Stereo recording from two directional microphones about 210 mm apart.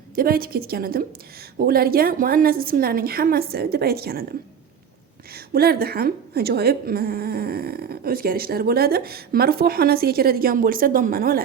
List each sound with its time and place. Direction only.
0.2 s a woman's voice: 45° right (ahead or behind)
5.3 s a woman's voice: 45° right (ahead or behind)